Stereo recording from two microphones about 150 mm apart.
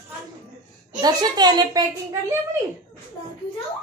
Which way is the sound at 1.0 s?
25° right (ahead or behind).